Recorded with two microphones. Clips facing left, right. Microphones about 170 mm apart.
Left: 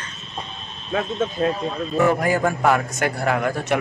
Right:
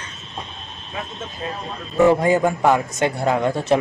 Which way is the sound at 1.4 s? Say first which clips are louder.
Left 8 dB; 50° left (ahead or behind).